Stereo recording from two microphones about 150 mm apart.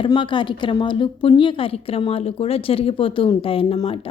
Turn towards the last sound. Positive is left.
turn(degrees=35)  # may be behind; listen again after turning